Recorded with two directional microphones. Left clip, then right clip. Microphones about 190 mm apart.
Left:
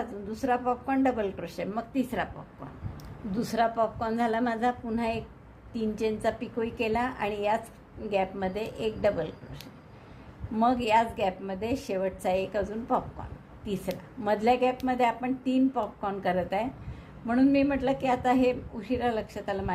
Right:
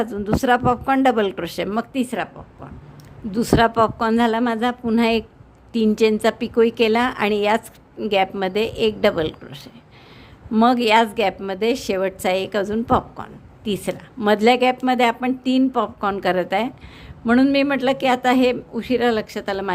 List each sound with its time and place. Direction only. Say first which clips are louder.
0.0 s a woman's voice: right 12 dB; 45° right (ahead or behind)
3.3 s a woman's voice: right 10 dB; 40° right (ahead or behind)